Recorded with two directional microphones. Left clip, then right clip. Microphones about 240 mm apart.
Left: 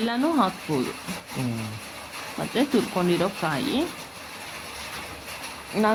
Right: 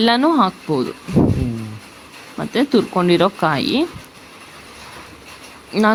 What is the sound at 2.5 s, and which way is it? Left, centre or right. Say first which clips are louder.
Speech: right 7 dB; right.